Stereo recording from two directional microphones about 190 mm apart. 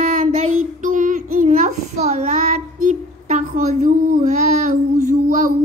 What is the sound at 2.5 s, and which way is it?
Speech, 45° right (ahead or behind).